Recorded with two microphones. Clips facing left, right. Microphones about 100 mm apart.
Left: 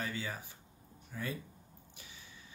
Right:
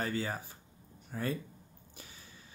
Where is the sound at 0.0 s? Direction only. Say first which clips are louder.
Right 5 dB; 40° right (ahead or behind).